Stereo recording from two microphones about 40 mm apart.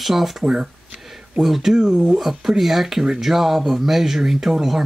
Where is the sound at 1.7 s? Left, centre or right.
Centre.